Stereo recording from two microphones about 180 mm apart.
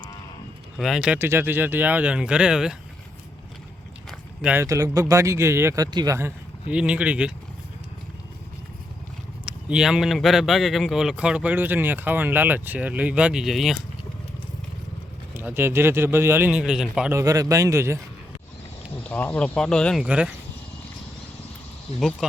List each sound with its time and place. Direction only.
0.8 s speech: centre (ahead or behind)
4.4 s speech: 15° right (ahead or behind)
9.5 s speech: 5° right (ahead or behind)
15.4 s speech: 10° right (ahead or behind)
17.1 s speech: 20° right (ahead or behind)
19.0 s speech: 10° left (ahead or behind)
20.1 s speech: 5° right (ahead or behind)
22.2 s speech: 5° right (ahead or behind)